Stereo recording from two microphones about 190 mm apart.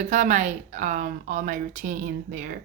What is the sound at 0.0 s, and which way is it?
A woman's voice, 40° right (ahead or behind).